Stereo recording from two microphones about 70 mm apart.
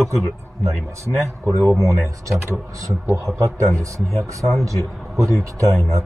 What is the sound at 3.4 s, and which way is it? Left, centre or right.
Speech, right.